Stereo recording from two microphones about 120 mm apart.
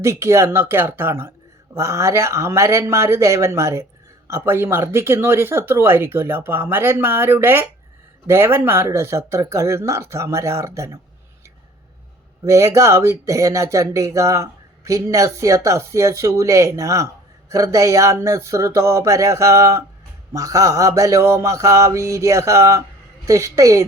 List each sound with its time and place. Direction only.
0.0 s speech: 25° right (ahead or behind)
12.5 s speech: 25° right (ahead or behind)